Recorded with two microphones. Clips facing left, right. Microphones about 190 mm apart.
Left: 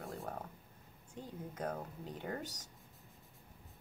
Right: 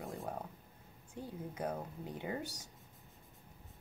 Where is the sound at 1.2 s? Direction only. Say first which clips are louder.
Right 2 dB; 10° right (ahead or behind).